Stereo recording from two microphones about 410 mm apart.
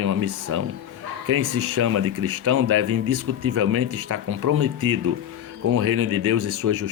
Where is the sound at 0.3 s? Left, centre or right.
Right.